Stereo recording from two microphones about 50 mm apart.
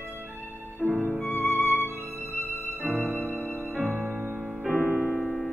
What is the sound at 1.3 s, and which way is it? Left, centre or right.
Music, left.